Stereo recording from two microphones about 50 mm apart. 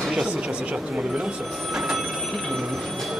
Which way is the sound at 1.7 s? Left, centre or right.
Centre.